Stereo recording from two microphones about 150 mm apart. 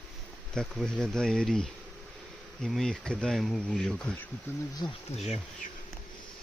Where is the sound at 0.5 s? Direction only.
5° left (ahead or behind).